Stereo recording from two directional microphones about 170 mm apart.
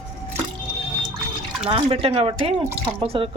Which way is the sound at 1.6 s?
35° right (ahead or behind).